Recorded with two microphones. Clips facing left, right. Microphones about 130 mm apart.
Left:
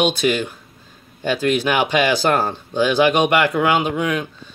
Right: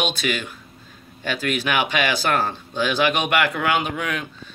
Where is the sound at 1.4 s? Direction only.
25° left (ahead or behind).